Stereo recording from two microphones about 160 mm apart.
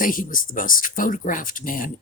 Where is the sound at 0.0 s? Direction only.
60° left (ahead or behind).